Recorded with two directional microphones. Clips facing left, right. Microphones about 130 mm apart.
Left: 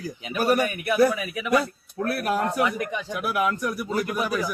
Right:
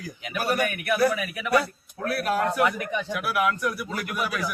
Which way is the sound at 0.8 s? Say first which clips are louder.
Left 2 dB; 20° left (ahead or behind).